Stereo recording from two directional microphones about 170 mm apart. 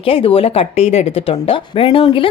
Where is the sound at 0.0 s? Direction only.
35° left (ahead or behind).